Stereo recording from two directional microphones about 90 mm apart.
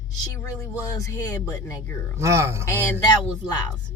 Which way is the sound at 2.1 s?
35° right (ahead or behind).